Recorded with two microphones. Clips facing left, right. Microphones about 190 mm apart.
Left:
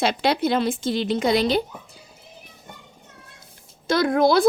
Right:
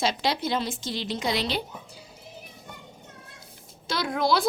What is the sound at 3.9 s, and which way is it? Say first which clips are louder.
Speech: left 7 dB; 50° left (ahead or behind).